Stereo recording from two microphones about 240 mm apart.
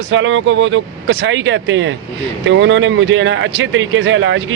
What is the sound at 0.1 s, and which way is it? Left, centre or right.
Speech, right.